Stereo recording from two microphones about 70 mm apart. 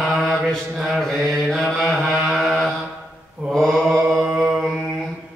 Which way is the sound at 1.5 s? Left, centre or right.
Centre.